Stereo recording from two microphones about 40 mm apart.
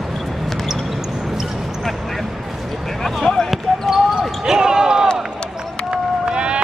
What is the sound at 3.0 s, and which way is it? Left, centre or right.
Basketball bounce, centre.